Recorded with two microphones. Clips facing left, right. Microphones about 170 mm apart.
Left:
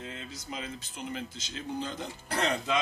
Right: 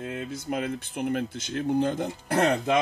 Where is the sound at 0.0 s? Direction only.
55° right (ahead or behind).